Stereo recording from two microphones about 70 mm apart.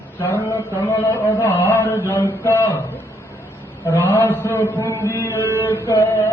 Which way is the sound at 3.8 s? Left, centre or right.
Left.